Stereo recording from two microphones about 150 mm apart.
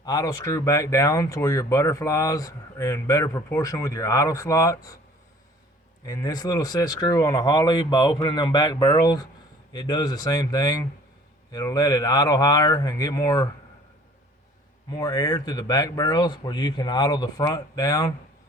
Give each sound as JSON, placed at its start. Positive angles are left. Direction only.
{"t": 0.0, "sound": "speech", "side_deg": 25}
{"t": 6.1, "sound": "speech", "side_deg": 25}
{"t": 14.8, "sound": "speech", "side_deg": 25}